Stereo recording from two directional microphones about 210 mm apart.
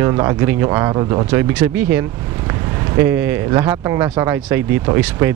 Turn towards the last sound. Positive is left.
turn(degrees=-10)  # may be behind; listen again after turning